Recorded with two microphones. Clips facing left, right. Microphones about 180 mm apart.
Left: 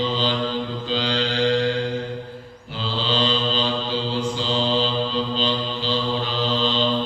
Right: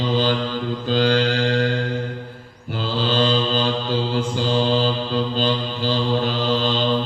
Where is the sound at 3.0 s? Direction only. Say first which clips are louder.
Right 3 dB; 50° right (ahead or behind).